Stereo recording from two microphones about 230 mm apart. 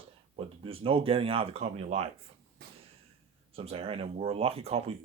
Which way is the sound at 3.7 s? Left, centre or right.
Right.